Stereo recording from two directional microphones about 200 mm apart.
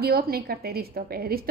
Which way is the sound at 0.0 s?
50° right (ahead or behind).